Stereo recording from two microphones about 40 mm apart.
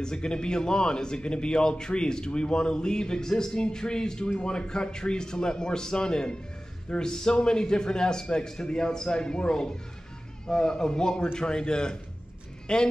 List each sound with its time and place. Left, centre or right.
0.0 s a man's voice: centre